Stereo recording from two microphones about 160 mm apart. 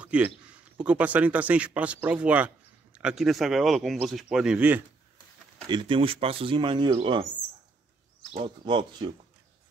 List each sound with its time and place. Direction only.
0.0 s speech: 10° right (ahead or behind)
5.7 s speech: 30° right (ahead or behind)
8.3 s speech: 30° right (ahead or behind)